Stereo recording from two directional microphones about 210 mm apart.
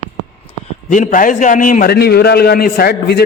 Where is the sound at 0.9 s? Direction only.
40° left (ahead or behind).